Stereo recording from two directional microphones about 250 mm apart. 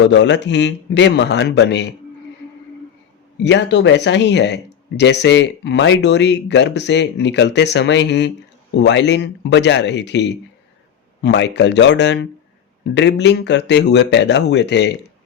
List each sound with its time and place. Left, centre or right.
0.1 s speech: left
3.4 s speech: left